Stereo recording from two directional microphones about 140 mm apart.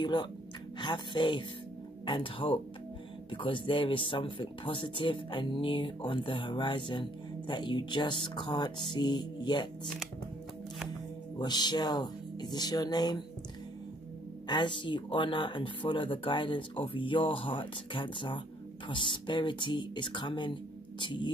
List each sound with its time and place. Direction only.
0.0 s speech: 30° left (ahead or behind)
11.3 s speech: 30° left (ahead or behind)
14.5 s speech: 35° left (ahead or behind)